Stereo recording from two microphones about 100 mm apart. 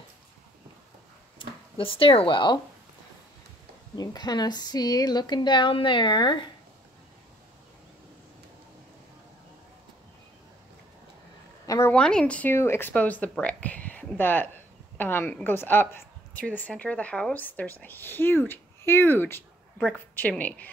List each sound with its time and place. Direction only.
1.8 s speech: 65° left (ahead or behind)
3.9 s speech: 40° left (ahead or behind)
11.6 s a sound: 35° left (ahead or behind)
11.9 s speech: 10° left (ahead or behind)
12.4 s a woman's voice: 25° left (ahead or behind)